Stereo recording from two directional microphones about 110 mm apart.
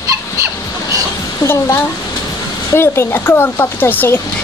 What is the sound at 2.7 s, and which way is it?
Speech, 20° left (ahead or behind).